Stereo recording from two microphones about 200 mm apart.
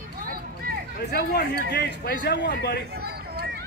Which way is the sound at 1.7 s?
55° left (ahead or behind).